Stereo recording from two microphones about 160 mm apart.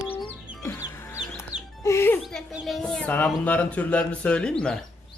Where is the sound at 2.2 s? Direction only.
Centre (ahead or behind).